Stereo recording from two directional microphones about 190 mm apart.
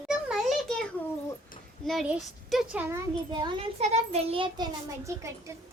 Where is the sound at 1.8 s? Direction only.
5° right (ahead or behind); by 4.7 s 25° right (ahead or behind).